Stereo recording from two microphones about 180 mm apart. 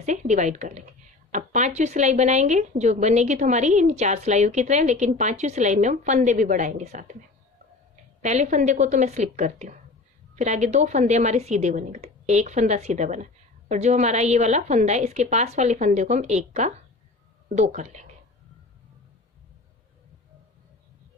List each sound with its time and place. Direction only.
0.0 s speech: 40° right (ahead or behind)
8.2 s speech: 40° right (ahead or behind)